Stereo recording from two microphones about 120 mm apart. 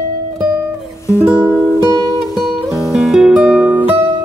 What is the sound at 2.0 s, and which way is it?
Music, 30° left (ahead or behind).